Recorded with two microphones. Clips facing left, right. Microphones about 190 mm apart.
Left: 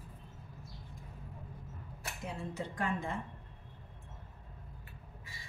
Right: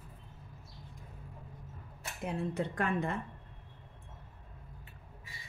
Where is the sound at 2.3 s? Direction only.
60° right (ahead or behind).